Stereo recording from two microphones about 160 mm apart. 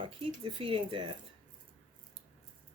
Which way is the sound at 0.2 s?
35° right (ahead or behind).